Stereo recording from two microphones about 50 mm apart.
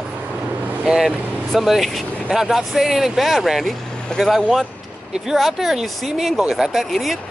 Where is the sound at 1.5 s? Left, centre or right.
Centre.